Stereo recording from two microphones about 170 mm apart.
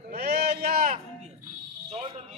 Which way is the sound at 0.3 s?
65° right (ahead or behind).